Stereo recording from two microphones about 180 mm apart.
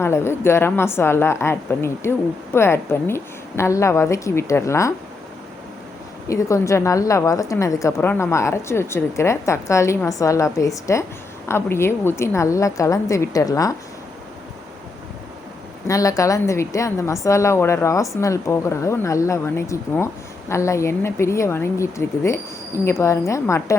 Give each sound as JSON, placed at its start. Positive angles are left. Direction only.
{"t": 0.0, "sound": "a woman's voice", "side_deg": 15}
{"t": 6.2, "sound": "a woman's voice", "side_deg": 15}
{"t": 15.9, "sound": "a woman's voice", "side_deg": 20}